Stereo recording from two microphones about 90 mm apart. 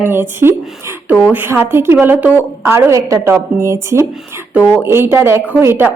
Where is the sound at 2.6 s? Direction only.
35° right (ahead or behind).